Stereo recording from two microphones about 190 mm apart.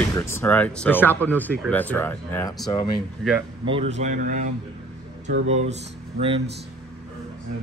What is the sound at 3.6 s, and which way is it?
Speech, 30° right (ahead or behind).